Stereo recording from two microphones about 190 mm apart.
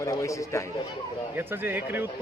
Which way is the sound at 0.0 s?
15° left (ahead or behind).